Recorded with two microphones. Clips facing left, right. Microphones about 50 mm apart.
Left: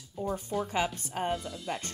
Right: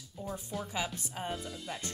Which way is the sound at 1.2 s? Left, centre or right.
Centre.